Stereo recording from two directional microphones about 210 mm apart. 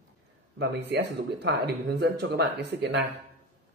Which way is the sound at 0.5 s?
55° right (ahead or behind).